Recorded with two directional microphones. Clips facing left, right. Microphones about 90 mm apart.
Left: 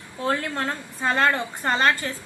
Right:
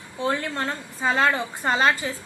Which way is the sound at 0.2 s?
Centre (ahead or behind).